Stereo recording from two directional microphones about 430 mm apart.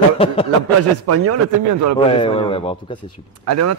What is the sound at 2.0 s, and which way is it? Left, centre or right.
Speech, centre.